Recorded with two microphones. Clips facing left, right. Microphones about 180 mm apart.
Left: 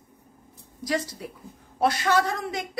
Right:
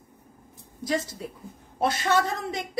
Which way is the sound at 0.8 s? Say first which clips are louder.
Even; 25° right (ahead or behind).